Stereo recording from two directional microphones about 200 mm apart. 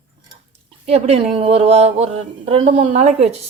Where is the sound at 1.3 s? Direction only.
30° right (ahead or behind).